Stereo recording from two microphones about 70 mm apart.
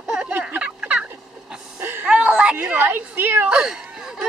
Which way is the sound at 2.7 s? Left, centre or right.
Right.